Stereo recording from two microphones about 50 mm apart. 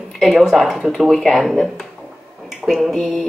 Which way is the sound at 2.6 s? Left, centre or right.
Right.